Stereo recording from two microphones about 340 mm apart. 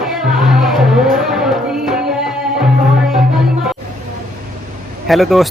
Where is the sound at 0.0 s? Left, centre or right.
Centre.